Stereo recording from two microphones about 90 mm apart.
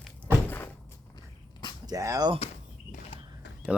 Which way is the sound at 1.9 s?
40° right (ahead or behind).